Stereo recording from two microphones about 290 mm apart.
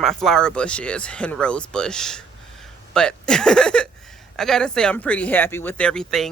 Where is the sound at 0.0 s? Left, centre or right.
Centre.